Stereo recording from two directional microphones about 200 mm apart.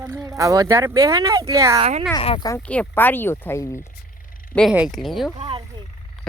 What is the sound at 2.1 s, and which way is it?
Speech, 25° left (ahead or behind).